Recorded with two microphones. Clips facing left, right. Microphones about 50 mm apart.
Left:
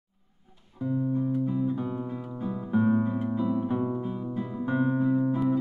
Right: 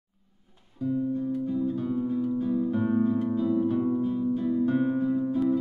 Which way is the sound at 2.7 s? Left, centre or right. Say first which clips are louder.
Left 5 dB; centre.